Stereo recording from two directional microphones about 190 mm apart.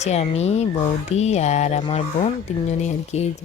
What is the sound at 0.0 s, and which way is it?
Speech, 35° left (ahead or behind).